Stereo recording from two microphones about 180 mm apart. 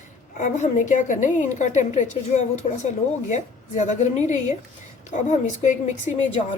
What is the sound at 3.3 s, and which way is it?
A woman's voice, 40° left (ahead or behind).